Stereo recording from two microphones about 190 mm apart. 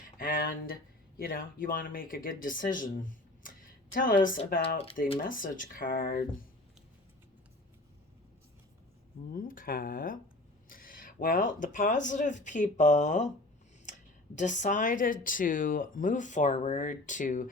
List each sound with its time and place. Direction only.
0.0 s speech: 50° left (ahead or behind)
9.3 s speech: 50° left (ahead or behind)
14.3 s speech: 40° left (ahead or behind)